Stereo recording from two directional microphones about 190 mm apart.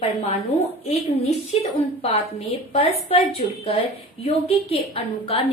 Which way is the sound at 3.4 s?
40° left (ahead or behind).